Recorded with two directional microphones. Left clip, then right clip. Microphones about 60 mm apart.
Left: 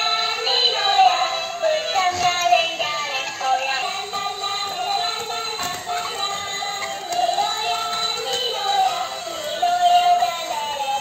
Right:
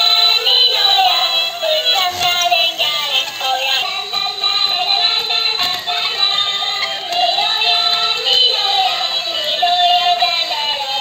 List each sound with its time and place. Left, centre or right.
0.5 s music: right